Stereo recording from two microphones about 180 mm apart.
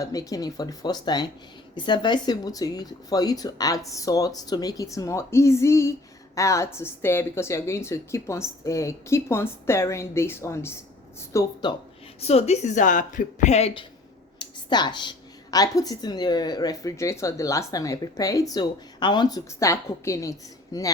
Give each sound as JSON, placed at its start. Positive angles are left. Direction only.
{"t": 0.0, "sound": "a woman's voice", "side_deg": 20}
{"t": 12.2, "sound": "a woman's voice", "side_deg": 35}